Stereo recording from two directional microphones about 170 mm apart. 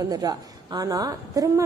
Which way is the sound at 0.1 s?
20° right (ahead or behind).